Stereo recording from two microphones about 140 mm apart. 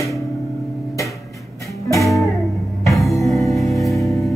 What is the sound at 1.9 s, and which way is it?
Music, 20° left (ahead or behind).